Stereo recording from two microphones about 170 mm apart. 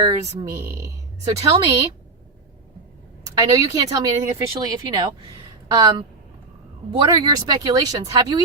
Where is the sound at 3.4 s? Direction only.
20° right (ahead or behind).